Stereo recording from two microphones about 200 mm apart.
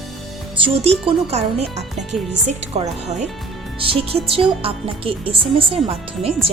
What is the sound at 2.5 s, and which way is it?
Speech, 35° right (ahead or behind).